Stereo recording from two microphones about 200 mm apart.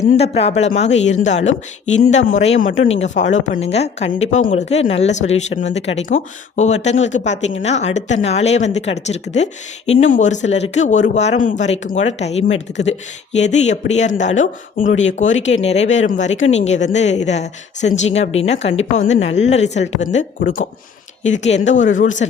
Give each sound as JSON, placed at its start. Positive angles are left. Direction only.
{"t": 0.1, "sound": "speech", "side_deg": 30}